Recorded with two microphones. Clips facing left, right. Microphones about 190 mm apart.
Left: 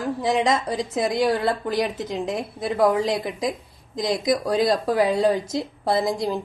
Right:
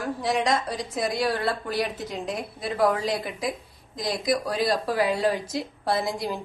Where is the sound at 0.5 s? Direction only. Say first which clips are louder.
Left 3 dB; 20° left (ahead or behind).